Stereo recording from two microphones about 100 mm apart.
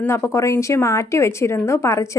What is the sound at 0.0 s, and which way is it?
A woman's voice, 25° left (ahead or behind).